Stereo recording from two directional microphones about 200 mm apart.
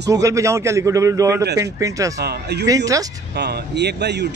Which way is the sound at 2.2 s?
55° right (ahead or behind).